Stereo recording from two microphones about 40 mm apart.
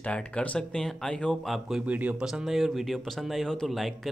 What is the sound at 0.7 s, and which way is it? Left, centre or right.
Speech, centre.